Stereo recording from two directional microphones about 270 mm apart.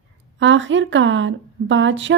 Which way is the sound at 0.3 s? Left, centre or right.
Right.